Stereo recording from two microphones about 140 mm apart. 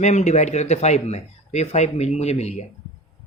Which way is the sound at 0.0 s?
55° left (ahead or behind).